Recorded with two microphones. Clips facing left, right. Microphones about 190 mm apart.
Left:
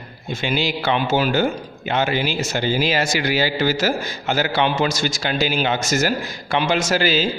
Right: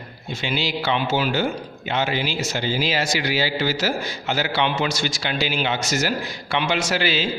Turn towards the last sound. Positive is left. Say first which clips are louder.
# left 3 dB
turn(degrees=40)  # may be behind; listen again after turning